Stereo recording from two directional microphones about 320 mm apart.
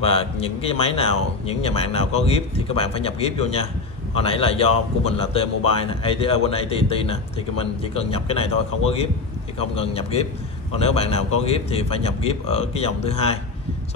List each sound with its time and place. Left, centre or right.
0.0 s a man's voice: centre
9.6 s a man's voice: centre